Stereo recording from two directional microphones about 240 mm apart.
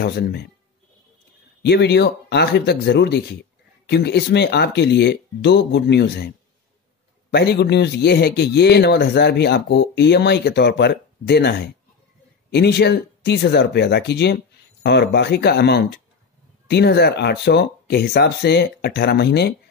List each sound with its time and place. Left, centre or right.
0.0 s speech: left
1.6 s a man's voice: left